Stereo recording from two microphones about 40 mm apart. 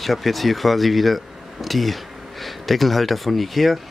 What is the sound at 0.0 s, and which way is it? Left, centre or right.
Speech, centre.